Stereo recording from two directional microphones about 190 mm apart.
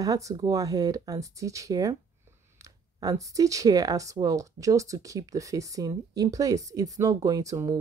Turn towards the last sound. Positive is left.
turn(degrees=-15)  # may be behind; listen again after turning